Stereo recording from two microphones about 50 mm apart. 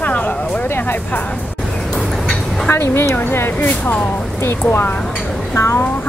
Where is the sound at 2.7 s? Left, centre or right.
Left.